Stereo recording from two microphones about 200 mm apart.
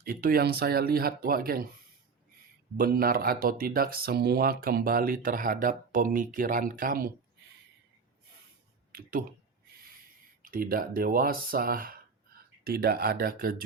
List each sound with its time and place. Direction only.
0.0 s speech: 45° right (ahead or behind)
2.7 s speech: 45° right (ahead or behind)
8.9 s a sound: 45° right (ahead or behind)
10.4 s speech: 45° right (ahead or behind)